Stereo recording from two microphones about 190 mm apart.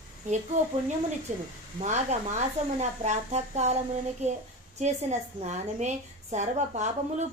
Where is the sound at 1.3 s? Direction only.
35° right (ahead or behind).